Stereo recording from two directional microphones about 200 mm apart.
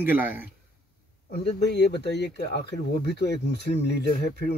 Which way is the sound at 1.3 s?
60° left (ahead or behind).